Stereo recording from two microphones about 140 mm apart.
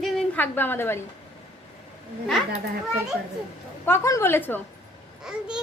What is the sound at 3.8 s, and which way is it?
Speech, 20° left (ahead or behind).